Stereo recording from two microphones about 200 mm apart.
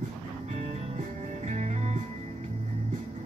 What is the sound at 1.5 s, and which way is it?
Music, 35° right (ahead or behind).